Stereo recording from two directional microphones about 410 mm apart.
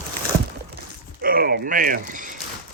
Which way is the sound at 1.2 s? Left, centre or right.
Right.